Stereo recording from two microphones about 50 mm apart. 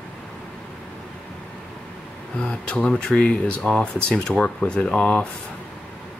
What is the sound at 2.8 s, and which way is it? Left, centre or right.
Speech, centre.